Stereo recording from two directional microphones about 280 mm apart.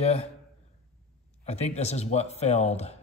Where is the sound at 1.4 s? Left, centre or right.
Left.